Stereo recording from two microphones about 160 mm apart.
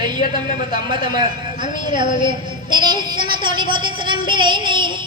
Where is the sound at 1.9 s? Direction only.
30° right (ahead or behind).